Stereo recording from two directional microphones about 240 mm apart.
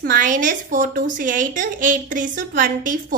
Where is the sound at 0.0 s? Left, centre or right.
Right.